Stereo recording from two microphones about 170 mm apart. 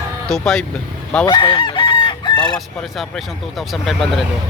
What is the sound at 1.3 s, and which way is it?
Chicken, 25° left (ahead or behind).